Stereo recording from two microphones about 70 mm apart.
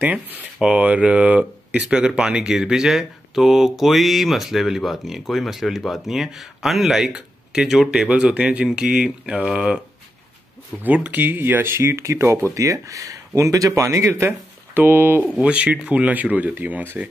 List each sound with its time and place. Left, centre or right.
0.6 s speech: centre
8.1 s speech: centre
10.8 s speech: right
12.5 s speech: right
14.8 s speech: right
15.3 s speech: centre